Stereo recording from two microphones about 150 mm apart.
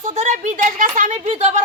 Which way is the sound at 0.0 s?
55° right (ahead or behind).